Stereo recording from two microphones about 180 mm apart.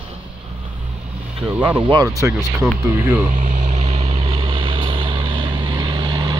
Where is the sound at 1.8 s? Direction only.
25° right (ahead or behind).